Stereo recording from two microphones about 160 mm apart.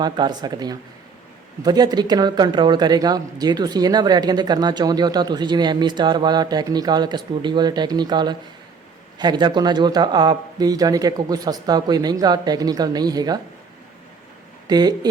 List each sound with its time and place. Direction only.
0.0 s speech: 25° right (ahead or behind)
14.7 s speech: 25° right (ahead or behind)